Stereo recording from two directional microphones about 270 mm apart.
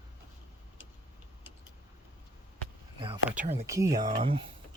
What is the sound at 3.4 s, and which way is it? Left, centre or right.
Speech, right.